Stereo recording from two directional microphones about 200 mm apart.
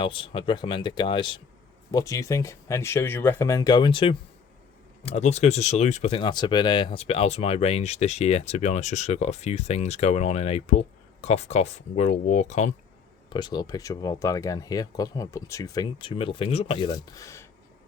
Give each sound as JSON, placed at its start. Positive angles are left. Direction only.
{"t": 0.0, "sound": "speech", "side_deg": 25}
{"t": 13.3, "sound": "speech", "side_deg": 20}